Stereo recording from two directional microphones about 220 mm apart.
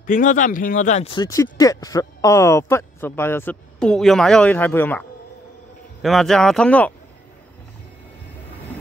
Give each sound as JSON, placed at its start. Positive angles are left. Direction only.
{"t": 0.0, "sound": "speech", "side_deg": 35}
{"t": 1.1, "sound": "speech", "side_deg": 15}
{"t": 6.0, "sound": "speech", "side_deg": 0}